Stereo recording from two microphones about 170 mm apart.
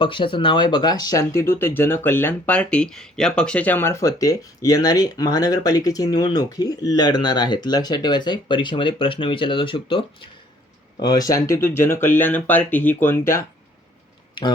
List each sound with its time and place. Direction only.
0.0 s speech: 30° left (ahead or behind)